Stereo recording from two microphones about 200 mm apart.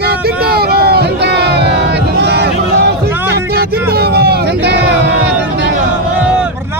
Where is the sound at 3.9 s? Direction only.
50° right (ahead or behind).